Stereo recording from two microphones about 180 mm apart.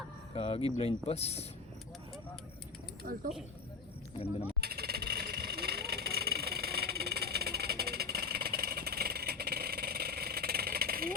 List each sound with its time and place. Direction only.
0.3 s speech: 30° left (ahead or behind)
3.0 s speech: 55° right (ahead or behind)
4.6 s vehicle: 60° right (ahead or behind)